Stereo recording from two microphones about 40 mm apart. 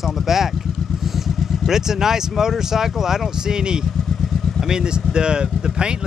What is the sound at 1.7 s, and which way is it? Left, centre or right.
Speech, centre.